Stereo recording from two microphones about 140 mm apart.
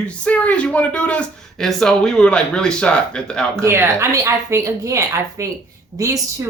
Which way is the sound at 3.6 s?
20° right (ahead or behind).